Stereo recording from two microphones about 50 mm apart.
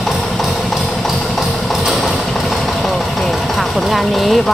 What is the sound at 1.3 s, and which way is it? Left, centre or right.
Clip-clop, centre.